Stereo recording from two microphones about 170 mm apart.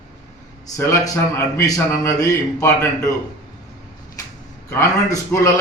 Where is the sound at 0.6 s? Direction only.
20° left (ahead or behind).